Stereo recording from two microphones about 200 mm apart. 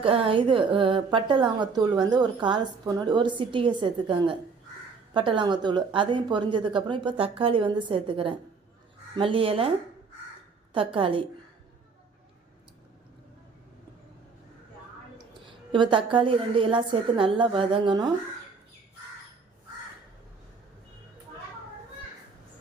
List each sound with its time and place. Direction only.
0.0 s a woman's voice: 25° right (ahead or behind)
10.8 s a woman's voice: 25° right (ahead or behind)
15.7 s a woman's voice: 25° right (ahead or behind)